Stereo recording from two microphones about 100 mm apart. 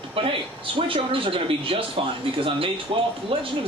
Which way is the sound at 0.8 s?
60° right (ahead or behind).